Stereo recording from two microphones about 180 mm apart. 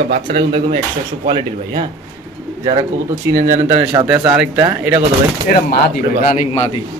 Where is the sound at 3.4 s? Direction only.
20° right (ahead or behind).